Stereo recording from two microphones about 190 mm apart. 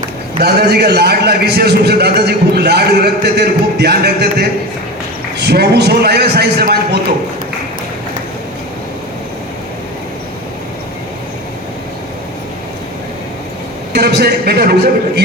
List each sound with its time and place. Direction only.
0.4 s a man's voice: 60° right (ahead or behind)
13.9 s a man's voice: 60° right (ahead or behind)